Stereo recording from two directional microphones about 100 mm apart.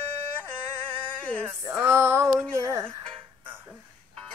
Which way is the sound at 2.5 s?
30° right (ahead or behind).